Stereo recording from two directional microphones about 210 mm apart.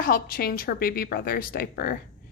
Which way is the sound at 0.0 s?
45° left (ahead or behind).